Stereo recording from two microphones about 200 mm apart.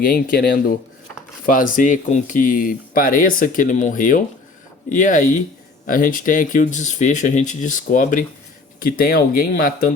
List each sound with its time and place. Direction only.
0.0 s speech: 45° left (ahead or behind)